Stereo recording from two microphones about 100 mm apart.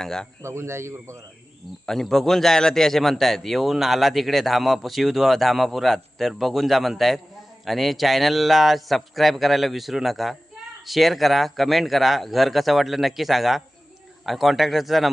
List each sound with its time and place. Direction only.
0.0 s a man's voice: 5° left (ahead or behind)
0.4 s a man's voice: 25° right (ahead or behind)
1.9 s a man's voice: 5° left (ahead or behind)